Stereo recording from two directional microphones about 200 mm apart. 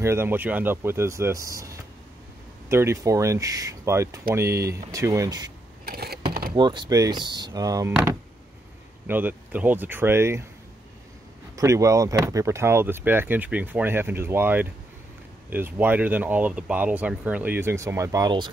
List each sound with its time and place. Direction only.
0.0 s speech: 10° right (ahead or behind)
5.9 s a sound: 50° right (ahead or behind)
6.5 s speech: 25° right (ahead or behind)
11.5 s speech: 15° right (ahead or behind)